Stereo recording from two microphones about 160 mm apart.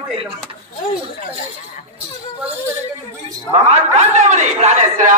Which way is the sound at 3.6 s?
45° right (ahead or behind).